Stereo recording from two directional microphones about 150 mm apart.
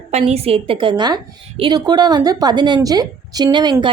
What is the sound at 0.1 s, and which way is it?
A woman's voice, 45° right (ahead or behind).